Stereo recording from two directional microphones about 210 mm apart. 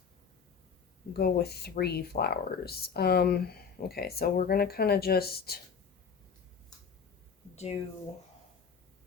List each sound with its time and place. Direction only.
1.1 s speech: 50° left (ahead or behind)